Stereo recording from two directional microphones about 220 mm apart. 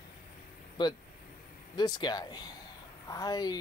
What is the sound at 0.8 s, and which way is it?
Speech, 20° left (ahead or behind).